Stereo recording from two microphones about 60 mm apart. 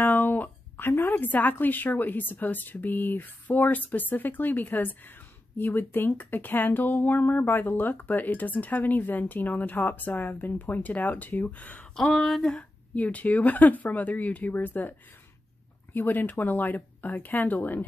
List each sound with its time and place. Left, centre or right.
0.0 s speech: left
11.9 s speech: centre
12.5 s speech: left